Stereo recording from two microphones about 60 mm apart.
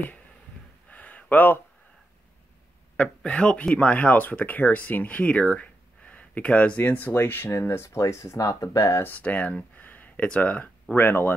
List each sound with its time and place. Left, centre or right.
0.8 s a sound: left
3.3 s speech: centre; by 7.5 s left
7.5 s speech: left
9.0 s speech: left
11.0 s speech: left